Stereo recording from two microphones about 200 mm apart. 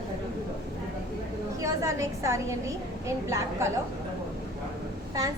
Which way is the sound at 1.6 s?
15° right (ahead or behind).